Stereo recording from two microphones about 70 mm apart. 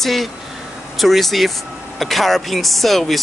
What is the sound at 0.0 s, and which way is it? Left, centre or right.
Speech, centre.